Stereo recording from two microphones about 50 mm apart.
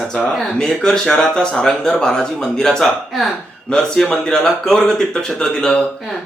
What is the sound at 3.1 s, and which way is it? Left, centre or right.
Speech, centre.